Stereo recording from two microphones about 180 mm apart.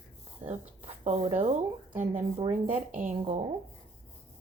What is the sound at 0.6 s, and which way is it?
A woman's voice, 35° right (ahead or behind).